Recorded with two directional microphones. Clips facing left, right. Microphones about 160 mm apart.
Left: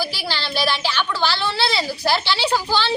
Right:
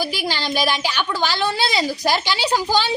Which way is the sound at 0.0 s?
15° right (ahead or behind).